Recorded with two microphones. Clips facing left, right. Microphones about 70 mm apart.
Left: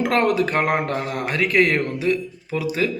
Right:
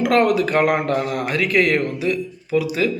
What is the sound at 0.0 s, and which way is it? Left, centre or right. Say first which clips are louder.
Speech: right 2 dB; left.